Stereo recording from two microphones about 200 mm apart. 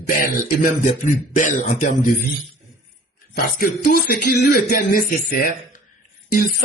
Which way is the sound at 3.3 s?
50° left (ahead or behind).